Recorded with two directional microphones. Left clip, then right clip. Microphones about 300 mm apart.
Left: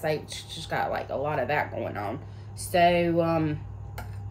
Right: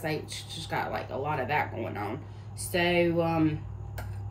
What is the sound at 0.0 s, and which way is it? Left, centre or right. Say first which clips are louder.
Speech: left 4 dB; centre.